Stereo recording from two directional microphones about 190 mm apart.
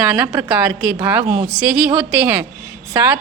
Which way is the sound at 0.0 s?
5° right (ahead or behind).